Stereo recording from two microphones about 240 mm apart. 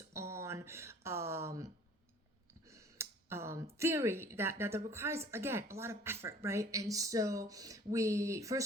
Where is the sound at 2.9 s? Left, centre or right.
Centre.